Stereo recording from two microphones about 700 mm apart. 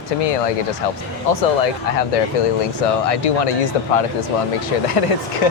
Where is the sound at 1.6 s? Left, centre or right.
Left.